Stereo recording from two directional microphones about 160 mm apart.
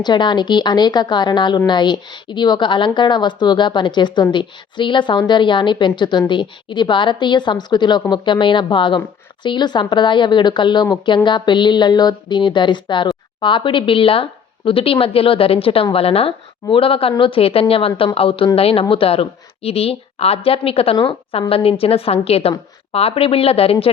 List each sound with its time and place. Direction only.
0.0 s a woman's voice: 30° left (ahead or behind)